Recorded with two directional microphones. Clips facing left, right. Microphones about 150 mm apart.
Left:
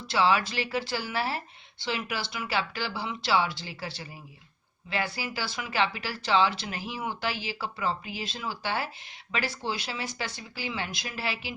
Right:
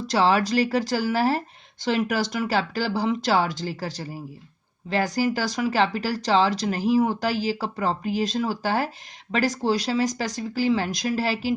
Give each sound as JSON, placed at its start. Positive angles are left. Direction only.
{"t": 0.1, "sound": "speech", "side_deg": -40}